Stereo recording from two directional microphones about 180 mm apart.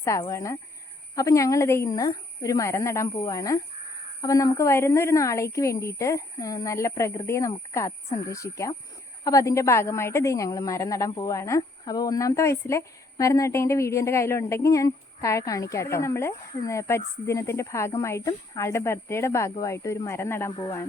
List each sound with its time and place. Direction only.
0.0 s a woman's voice: 15° left (ahead or behind)